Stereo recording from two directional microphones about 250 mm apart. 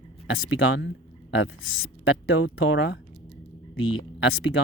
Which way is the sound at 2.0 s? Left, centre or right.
Left.